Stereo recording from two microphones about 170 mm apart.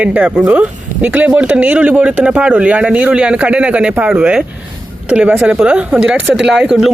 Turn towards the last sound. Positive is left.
turn(degrees=-5)  # may be behind; listen again after turning